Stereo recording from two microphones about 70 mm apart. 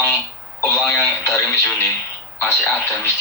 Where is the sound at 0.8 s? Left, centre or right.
Left.